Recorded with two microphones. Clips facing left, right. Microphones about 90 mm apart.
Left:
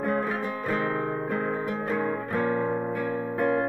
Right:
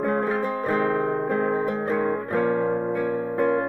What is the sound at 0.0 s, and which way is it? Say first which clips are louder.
Music: right 4 dB; 35° right (ahead or behind).